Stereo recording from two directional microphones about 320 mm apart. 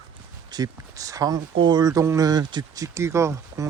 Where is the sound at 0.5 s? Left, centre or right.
Centre.